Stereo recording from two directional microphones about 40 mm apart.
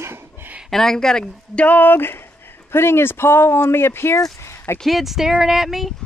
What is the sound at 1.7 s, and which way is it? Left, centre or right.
Speech, left.